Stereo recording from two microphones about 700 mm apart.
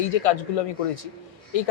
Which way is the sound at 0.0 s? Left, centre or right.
Left.